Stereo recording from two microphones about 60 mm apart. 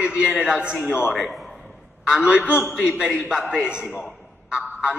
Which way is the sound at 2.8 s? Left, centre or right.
Centre.